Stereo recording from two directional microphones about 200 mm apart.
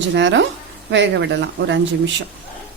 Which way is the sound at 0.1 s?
65° right (ahead or behind).